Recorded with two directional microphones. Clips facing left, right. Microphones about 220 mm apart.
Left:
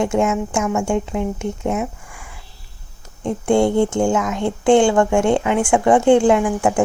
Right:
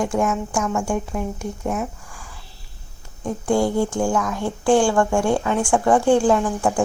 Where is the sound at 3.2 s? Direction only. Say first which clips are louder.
Left 4 dB; 25° left (ahead or behind).